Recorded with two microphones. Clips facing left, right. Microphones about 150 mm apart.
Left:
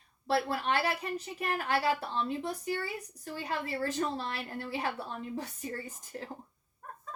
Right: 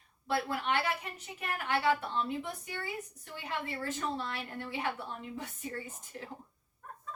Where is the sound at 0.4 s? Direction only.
35° left (ahead or behind).